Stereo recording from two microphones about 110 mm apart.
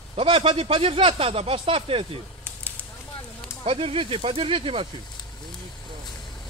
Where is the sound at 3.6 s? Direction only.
60° right (ahead or behind).